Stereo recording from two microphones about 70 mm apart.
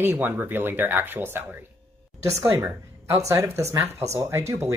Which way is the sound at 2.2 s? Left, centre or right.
Right.